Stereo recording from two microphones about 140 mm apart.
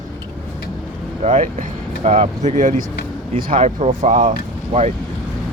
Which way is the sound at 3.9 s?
70° right (ahead or behind).